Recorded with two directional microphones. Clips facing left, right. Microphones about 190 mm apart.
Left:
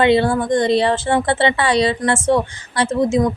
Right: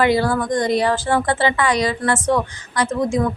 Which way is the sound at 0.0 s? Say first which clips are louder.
Left 3 dB; 25° left (ahead or behind).